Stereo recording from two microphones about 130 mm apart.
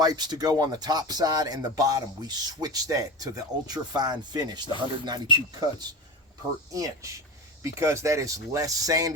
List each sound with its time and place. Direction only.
0.0 s speech: 30° right (ahead or behind)